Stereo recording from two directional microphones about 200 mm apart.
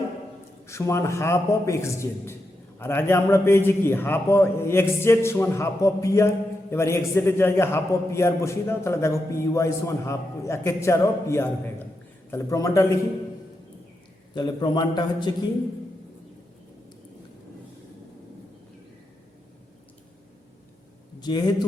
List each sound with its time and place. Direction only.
0.7 s a man's voice: 15° left (ahead or behind)
14.3 s a man's voice: 20° left (ahead or behind)
21.2 s a man's voice: 20° left (ahead or behind)